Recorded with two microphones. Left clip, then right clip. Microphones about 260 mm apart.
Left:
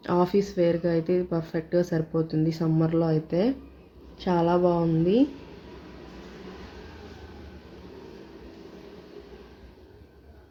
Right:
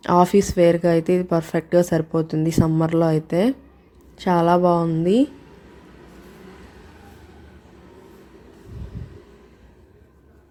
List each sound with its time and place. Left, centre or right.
0.0 s speech: right